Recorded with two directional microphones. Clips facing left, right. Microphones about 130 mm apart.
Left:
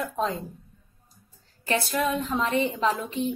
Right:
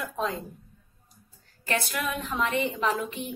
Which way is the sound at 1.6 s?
30° left (ahead or behind).